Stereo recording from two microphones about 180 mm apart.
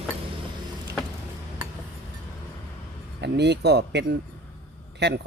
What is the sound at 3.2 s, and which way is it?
A man's voice, 70° right (ahead or behind).